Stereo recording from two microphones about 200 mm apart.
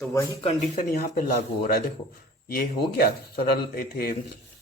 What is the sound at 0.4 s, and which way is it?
Speech, 40° left (ahead or behind).